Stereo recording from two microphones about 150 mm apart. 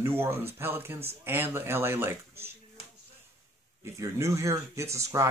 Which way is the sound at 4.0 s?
20° right (ahead or behind).